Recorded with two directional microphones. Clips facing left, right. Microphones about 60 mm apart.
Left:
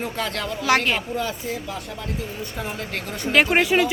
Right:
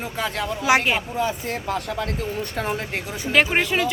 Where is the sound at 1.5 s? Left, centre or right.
Right.